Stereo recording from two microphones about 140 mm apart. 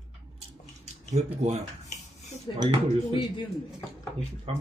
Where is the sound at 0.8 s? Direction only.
50° right (ahead or behind).